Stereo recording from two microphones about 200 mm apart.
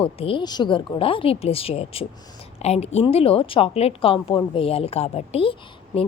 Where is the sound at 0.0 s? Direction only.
25° left (ahead or behind).